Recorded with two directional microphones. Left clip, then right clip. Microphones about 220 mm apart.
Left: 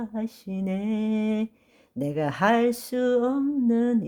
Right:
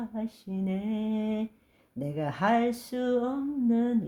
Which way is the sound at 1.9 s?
35° left (ahead or behind).